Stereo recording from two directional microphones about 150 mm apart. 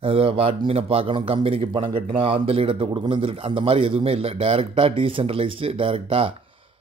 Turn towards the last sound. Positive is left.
turn(degrees=-35)  # may be behind; listen again after turning